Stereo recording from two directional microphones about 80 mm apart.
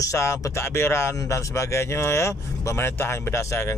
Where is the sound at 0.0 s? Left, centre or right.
Left.